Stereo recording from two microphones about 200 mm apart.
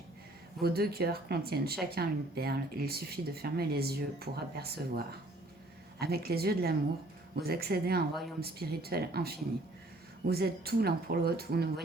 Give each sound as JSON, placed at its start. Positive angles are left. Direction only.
{"t": 0.6, "sound": "speech", "side_deg": -50}